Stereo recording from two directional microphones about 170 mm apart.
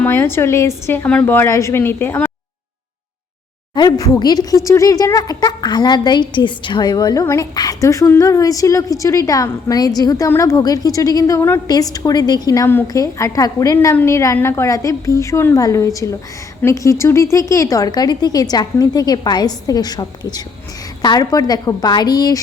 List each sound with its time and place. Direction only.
0.0 s a woman's voice: 15° left (ahead or behind)
3.8 s speech: 20° left (ahead or behind)